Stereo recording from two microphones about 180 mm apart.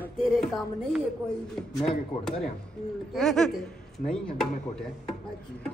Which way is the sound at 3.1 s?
5° left (ahead or behind).